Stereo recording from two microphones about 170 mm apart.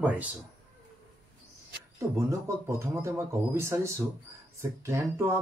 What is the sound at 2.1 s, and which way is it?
Speech, 15° right (ahead or behind).